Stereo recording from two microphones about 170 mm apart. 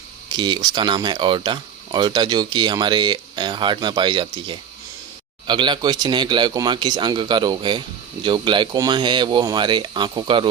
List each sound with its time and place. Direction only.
0.3 s speech: 25° right (ahead or behind)